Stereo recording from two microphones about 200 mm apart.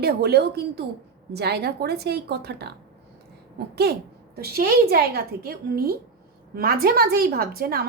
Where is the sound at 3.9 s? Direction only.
55° right (ahead or behind).